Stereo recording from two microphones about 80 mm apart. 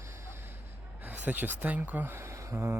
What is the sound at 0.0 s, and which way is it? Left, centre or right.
Vehicle, right.